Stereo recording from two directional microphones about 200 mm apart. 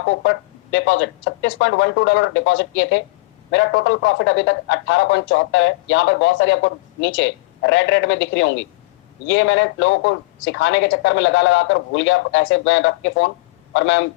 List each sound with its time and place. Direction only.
0.0 s speech: 70° left (ahead or behind)